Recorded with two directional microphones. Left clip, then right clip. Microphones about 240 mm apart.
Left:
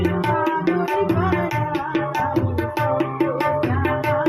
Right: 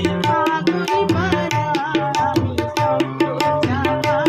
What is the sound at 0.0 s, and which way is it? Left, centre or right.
Music, right.